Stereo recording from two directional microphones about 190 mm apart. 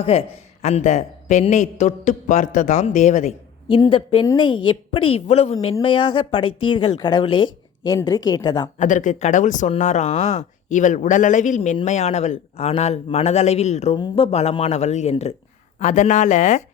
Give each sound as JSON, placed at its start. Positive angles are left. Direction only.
{"t": 0.0, "sound": "a woman's voice", "side_deg": 30}
{"t": 3.7, "sound": "speech", "side_deg": 25}
{"t": 8.8, "sound": "a woman's voice", "side_deg": 40}